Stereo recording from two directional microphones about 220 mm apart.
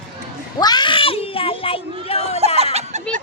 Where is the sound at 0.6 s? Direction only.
20° left (ahead or behind).